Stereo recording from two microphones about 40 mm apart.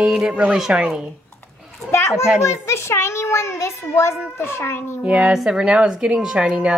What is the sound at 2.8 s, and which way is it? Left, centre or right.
A child's voice, left.